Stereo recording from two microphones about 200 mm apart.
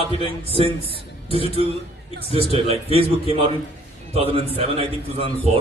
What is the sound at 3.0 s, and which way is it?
Speech, 25° right (ahead or behind).